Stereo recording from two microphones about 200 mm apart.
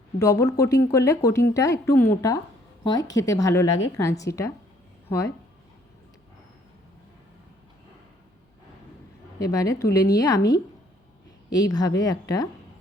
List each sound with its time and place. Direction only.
0.2 s speech: 15° left (ahead or behind)
9.4 s speech: 15° left (ahead or behind)